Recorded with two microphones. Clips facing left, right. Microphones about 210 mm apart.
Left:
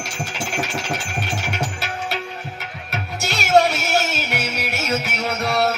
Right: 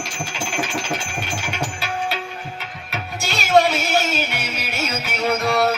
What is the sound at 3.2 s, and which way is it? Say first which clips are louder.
Music: even; 70° left (ahead or behind).